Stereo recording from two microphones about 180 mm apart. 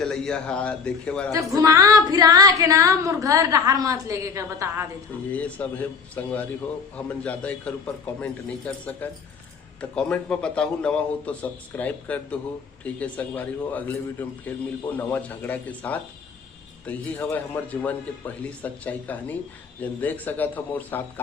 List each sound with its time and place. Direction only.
0.0 s a man's voice: 5° left (ahead or behind)
1.3 s speech: 20° right (ahead or behind)
5.3 s a man's voice: 10° left (ahead or behind)